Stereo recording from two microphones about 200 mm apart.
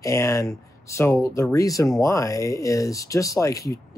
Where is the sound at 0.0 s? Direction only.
15° left (ahead or behind).